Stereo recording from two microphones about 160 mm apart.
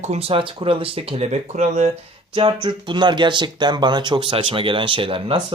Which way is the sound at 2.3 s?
30° right (ahead or behind).